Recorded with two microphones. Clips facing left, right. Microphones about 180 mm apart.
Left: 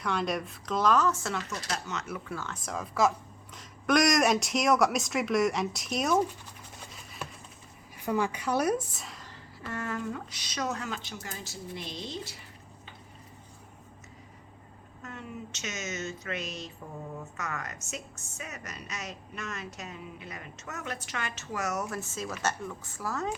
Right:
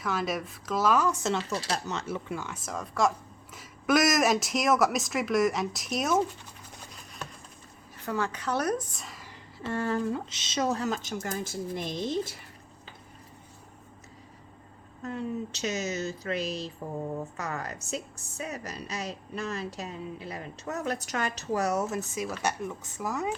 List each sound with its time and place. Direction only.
0.0 s speech: centre (ahead or behind)
2.6 s speech: centre (ahead or behind)
6.7 s a sound: 5° left (ahead or behind)
7.9 s a woman's voice: 15° left (ahead or behind); by 9.3 s centre (ahead or behind)
9.6 s a woman's voice: 30° right (ahead or behind); by 12.4 s 50° right (ahead or behind)
15.0 s a woman's voice: 35° right (ahead or behind); by 23.3 s 15° right (ahead or behind)